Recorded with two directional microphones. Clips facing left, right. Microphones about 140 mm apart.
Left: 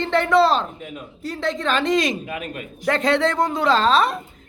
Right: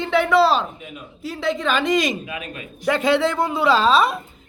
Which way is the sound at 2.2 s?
35° left (ahead or behind).